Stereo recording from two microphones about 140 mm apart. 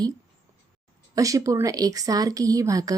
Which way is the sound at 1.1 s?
25° right (ahead or behind).